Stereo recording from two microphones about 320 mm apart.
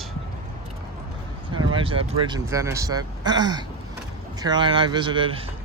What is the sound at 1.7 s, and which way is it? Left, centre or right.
Speech, centre.